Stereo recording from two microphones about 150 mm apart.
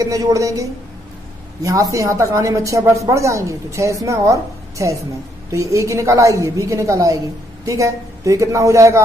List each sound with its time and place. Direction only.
0.0 s speech: 25° right (ahead or behind)